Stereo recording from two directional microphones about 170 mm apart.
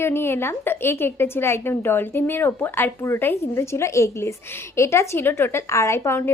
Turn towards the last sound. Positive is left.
turn(degrees=15)  # may be behind; listen again after turning